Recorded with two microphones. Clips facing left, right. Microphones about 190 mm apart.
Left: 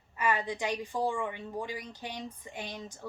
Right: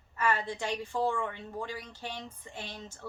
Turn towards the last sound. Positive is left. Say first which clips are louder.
# left 2 dB
turn(degrees=15)  # may be behind; listen again after turning